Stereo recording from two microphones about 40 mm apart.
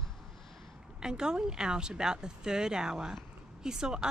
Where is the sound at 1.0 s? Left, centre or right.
Centre.